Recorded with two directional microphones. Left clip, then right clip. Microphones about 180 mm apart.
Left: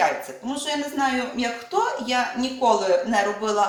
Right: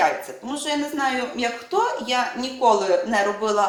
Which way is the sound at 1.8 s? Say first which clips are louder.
Right 1 dB; 35° right (ahead or behind).